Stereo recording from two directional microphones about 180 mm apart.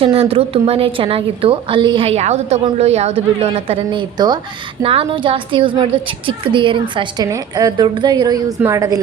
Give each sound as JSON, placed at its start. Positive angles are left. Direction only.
{"t": 0.0, "sound": "a woman's voice", "side_deg": -30}